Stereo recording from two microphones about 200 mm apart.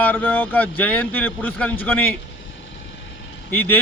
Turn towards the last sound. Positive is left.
turn(degrees=10)  # may be behind; listen again after turning